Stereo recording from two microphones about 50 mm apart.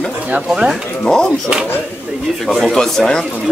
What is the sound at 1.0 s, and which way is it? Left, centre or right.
Speech, centre.